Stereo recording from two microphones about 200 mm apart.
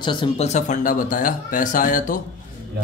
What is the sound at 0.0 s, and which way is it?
Speech, 25° left (ahead or behind).